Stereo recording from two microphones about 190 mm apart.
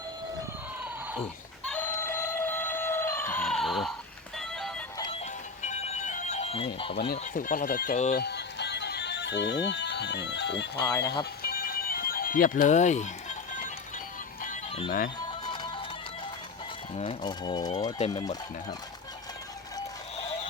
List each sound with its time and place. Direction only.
1.6 s a sound: 10° left (ahead or behind)
4.4 s music: centre (ahead or behind)
5.2 s music: 35° left (ahead or behind)
7.1 s speech: 45° left (ahead or behind)
8.2 s music: 60° left (ahead or behind)
10.8 s speech: 15° left (ahead or behind)
11.4 s music: 50° left (ahead or behind)
14.8 s speech: 50° left (ahead or behind)
15.4 s music: 25° left (ahead or behind)
16.9 s speech: 30° left (ahead or behind)